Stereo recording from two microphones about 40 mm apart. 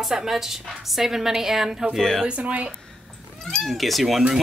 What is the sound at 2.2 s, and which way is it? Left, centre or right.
Speech, right.